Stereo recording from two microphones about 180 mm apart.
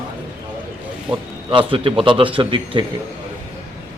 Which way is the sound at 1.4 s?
30° right (ahead or behind).